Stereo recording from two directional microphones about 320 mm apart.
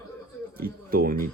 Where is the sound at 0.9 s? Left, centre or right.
Right.